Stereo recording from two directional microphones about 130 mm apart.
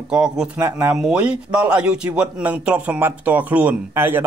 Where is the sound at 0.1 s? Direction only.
5° right (ahead or behind).